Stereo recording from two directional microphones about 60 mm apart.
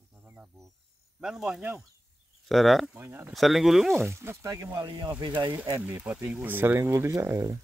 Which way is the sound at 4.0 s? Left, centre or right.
Right.